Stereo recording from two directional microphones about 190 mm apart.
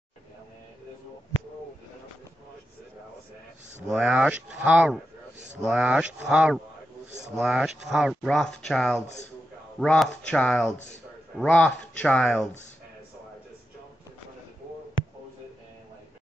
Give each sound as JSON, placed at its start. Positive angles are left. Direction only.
{"t": 3.9, "sound": "speech", "side_deg": -5}
{"t": 9.0, "sound": "speech", "side_deg": 35}
{"t": 9.8, "sound": "speech", "side_deg": 5}